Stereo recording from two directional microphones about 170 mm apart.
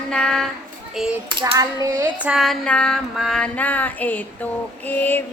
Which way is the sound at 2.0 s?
5° right (ahead or behind).